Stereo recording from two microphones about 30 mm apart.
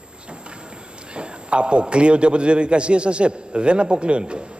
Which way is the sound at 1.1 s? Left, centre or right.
Right.